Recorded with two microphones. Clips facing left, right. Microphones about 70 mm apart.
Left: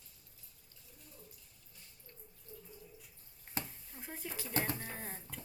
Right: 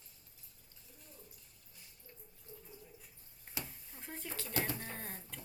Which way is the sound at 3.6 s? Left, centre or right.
Left.